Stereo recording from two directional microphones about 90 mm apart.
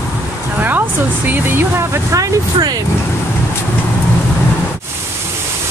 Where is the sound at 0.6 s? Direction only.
20° right (ahead or behind); by 2.8 s 40° right (ahead or behind).